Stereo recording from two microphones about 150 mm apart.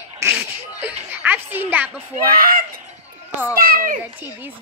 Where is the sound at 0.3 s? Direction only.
10° right (ahead or behind).